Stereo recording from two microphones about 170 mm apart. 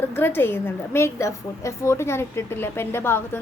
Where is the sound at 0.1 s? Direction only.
15° left (ahead or behind).